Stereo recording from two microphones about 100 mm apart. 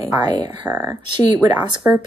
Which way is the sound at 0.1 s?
45° right (ahead or behind).